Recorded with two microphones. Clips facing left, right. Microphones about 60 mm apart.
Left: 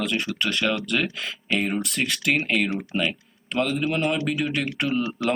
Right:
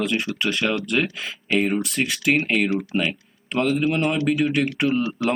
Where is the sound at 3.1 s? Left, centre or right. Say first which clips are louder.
Right 2 dB; centre.